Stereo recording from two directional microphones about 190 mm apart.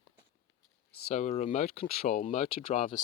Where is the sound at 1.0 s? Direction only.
35° left (ahead or behind).